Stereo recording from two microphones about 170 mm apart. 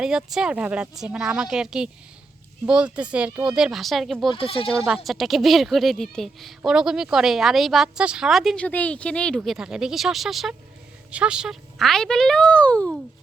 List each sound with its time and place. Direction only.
0.0 s a woman's voice: 5° right (ahead or behind)
4.3 s speech: 30° left (ahead or behind)
5.0 s a woman's voice: centre (ahead or behind)